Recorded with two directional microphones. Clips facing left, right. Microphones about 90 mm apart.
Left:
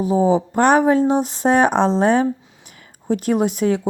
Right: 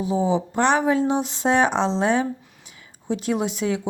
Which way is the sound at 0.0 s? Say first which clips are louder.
Left 5 dB; 40° left (ahead or behind).